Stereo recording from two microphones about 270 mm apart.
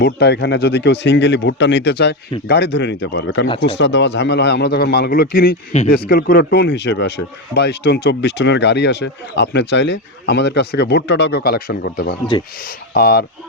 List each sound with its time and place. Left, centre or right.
0.0 s speech: left